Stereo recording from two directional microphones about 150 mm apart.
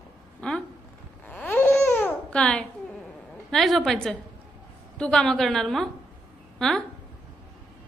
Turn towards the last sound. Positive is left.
turn(degrees=0)  # may be behind; listen again after turning